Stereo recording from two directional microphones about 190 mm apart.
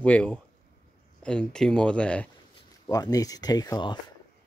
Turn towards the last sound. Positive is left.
turn(degrees=20)  # may be behind; listen again after turning